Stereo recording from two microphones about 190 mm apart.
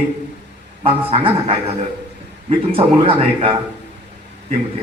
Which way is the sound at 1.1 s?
30° right (ahead or behind).